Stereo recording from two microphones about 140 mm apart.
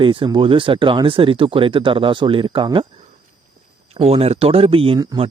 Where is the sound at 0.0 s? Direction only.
35° right (ahead or behind).